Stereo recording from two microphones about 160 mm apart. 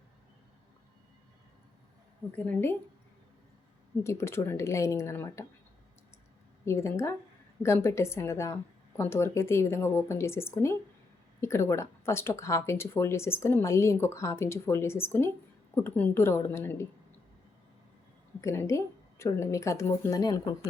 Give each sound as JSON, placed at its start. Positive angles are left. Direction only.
{"t": 2.3, "sound": "speech", "side_deg": 10}
{"t": 4.0, "sound": "speech", "side_deg": 15}
{"t": 6.7, "sound": "speech", "side_deg": 15}
{"t": 18.3, "sound": "a woman's voice", "side_deg": 15}